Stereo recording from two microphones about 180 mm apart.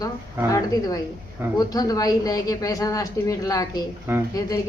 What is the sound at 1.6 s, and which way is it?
Speech, 20° left (ahead or behind).